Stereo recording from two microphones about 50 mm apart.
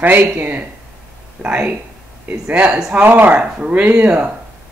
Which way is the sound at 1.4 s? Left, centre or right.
Right.